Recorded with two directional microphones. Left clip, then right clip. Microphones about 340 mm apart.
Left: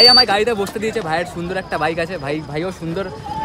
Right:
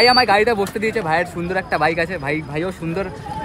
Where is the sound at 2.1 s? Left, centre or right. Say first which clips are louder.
Right 1 dB; left.